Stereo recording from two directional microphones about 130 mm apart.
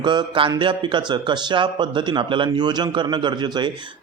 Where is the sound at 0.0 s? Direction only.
35° right (ahead or behind).